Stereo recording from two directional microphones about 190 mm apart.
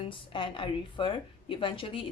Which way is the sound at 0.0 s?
25° left (ahead or behind).